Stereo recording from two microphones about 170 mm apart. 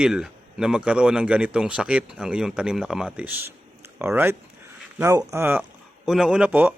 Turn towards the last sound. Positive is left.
turn(degrees=-10)  # may be behind; listen again after turning